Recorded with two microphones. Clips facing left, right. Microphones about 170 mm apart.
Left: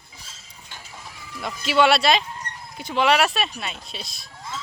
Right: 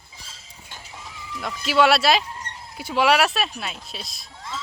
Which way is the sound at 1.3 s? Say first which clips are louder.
Even; centre (ahead or behind).